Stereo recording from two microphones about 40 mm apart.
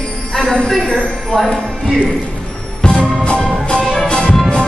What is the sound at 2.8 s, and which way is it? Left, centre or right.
Music, centre.